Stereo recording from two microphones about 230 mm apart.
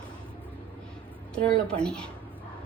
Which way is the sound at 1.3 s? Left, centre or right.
Centre.